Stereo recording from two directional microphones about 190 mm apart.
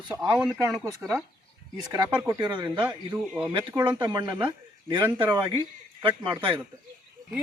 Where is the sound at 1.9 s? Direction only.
15° right (ahead or behind).